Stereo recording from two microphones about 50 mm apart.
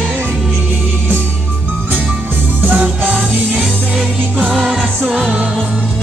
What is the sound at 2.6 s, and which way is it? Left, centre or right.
Music, right.